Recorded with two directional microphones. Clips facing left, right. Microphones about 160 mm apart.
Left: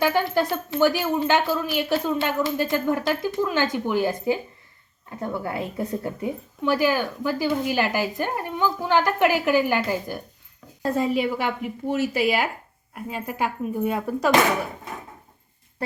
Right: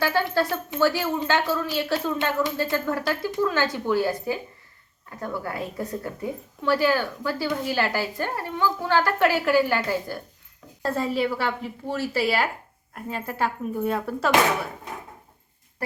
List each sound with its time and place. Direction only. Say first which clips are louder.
0.0 s a woman's voice: left 2 dB; 15° left (ahead or behind)